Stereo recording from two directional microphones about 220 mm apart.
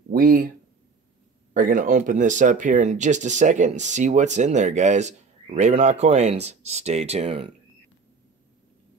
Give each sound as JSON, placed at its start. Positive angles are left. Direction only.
{"t": 0.1, "sound": "speech", "side_deg": -40}
{"t": 1.5, "sound": "speech", "side_deg": -40}